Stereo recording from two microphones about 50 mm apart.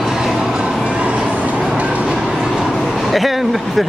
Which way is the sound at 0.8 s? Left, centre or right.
Right.